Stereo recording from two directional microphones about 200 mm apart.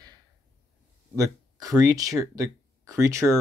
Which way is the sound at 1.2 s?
20° right (ahead or behind).